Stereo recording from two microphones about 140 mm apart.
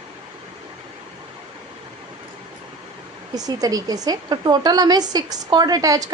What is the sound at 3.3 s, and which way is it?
A woman's voice, 25° right (ahead or behind).